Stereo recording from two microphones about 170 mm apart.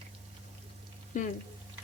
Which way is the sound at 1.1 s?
45° left (ahead or behind).